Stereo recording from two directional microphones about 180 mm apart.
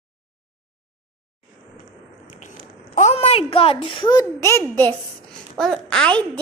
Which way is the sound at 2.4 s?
40° left (ahead or behind).